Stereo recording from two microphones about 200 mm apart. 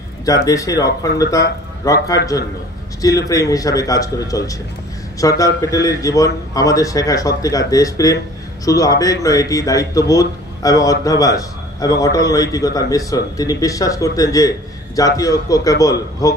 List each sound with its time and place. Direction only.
0.5 s speech: 15° left (ahead or behind)